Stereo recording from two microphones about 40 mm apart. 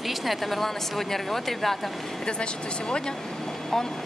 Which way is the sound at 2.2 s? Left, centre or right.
Left.